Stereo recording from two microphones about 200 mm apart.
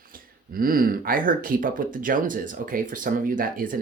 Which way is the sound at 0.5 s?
45° right (ahead or behind).